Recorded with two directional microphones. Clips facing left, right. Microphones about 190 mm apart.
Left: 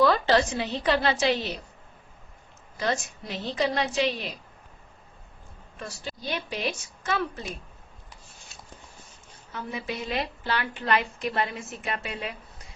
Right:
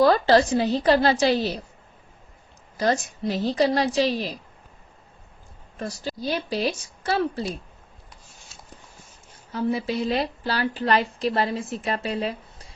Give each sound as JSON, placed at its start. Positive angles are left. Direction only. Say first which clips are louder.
{"t": 0.0, "sound": "a woman's voice", "louder": "right 4 dB", "side_deg": -40}
{"t": 2.7, "sound": "a woman's voice", "louder": "right 5 dB", "side_deg": -40}
{"t": 5.8, "sound": "a woman's voice", "louder": "right 7 dB", "side_deg": -35}
{"t": 9.5, "sound": "a woman's voice", "louder": "right 9 dB", "side_deg": -35}